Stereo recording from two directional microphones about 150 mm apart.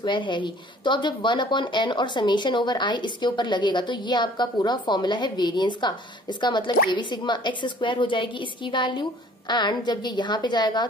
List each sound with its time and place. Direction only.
0.0 s a woman's voice: 30° left (ahead or behind)